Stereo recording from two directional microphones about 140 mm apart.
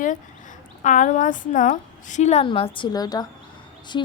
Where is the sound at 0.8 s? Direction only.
65° left (ahead or behind).